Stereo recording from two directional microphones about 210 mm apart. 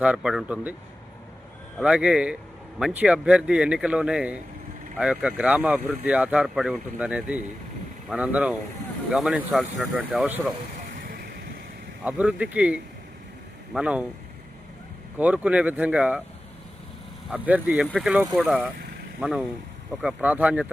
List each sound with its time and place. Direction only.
0.0 s a man's voice: 5° right (ahead or behind)
1.8 s a man's voice: 5° right (ahead or behind)
10.9 s vehicle: 45° right (ahead or behind)
12.0 s a man's voice: 5° right (ahead or behind)
15.2 s speech: 5° right (ahead or behind)
17.2 s a man's voice: 5° right (ahead or behind)